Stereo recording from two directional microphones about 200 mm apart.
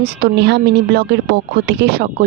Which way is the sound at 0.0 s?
55° right (ahead or behind).